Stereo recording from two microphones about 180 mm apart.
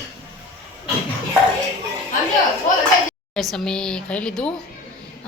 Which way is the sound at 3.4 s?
Centre (ahead or behind).